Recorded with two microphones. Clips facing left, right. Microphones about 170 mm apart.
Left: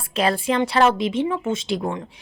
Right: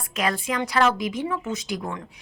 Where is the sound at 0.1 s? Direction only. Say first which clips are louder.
Left 5 dB; 30° left (ahead or behind).